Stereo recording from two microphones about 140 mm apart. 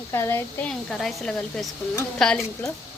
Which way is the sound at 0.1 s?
15° left (ahead or behind).